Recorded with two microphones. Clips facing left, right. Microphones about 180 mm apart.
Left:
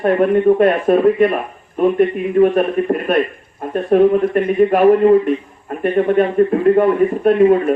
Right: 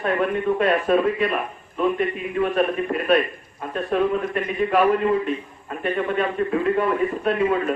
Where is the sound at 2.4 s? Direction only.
45° left (ahead or behind).